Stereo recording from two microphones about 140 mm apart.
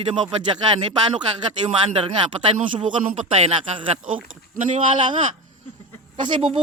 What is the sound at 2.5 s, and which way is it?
A man's voice, 40° right (ahead or behind).